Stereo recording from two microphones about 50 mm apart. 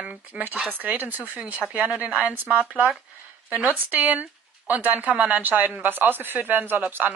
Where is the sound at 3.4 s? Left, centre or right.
Right.